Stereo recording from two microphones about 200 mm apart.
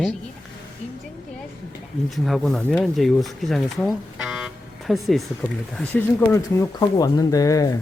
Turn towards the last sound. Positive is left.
turn(degrees=15)  # may be behind; listen again after turning